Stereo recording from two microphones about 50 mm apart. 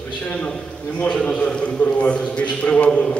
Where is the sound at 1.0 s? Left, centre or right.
Centre.